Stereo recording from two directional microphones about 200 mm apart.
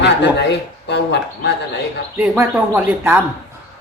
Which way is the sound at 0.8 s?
60° left (ahead or behind).